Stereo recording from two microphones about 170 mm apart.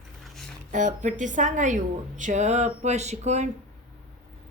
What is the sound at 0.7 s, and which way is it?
Speech, 50° right (ahead or behind).